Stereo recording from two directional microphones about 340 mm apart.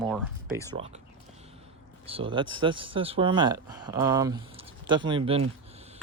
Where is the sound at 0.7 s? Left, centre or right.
Centre.